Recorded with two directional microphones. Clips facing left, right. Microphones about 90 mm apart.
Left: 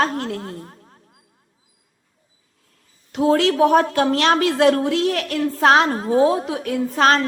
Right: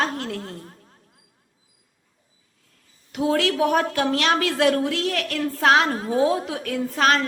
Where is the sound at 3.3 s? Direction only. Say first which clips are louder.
Left 5 dB; 30° left (ahead or behind).